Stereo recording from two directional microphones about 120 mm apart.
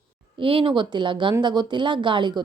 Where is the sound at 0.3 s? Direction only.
50° right (ahead or behind).